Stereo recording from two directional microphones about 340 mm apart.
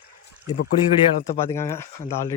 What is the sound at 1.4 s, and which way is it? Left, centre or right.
Speech, centre.